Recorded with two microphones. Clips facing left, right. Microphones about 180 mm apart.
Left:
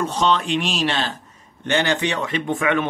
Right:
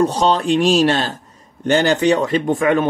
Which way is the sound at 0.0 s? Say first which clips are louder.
Right 5 dB; 35° right (ahead or behind).